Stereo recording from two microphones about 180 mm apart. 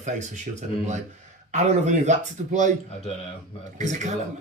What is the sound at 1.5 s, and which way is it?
Speech, 40° right (ahead or behind).